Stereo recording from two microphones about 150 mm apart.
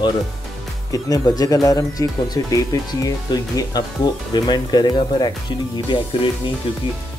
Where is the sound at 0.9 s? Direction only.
25° left (ahead or behind).